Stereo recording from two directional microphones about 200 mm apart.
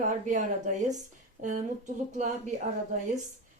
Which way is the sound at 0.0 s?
40° right (ahead or behind).